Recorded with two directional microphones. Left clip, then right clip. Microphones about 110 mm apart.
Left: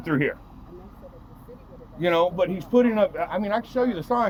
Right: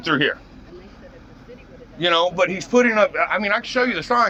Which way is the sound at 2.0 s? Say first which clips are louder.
Right 4 dB; 45° left (ahead or behind).